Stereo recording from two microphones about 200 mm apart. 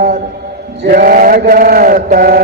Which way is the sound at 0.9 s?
45° right (ahead or behind).